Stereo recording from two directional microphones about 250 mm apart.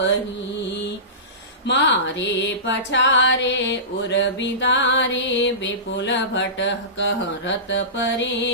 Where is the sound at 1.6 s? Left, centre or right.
Left.